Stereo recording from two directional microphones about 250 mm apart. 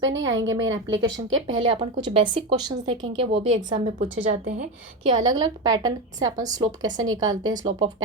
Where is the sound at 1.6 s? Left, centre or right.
Centre.